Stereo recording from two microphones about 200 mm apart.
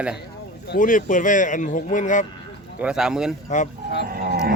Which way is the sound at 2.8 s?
5° right (ahead or behind).